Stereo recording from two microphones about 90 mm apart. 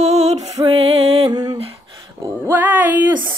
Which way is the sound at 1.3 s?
50° right (ahead or behind).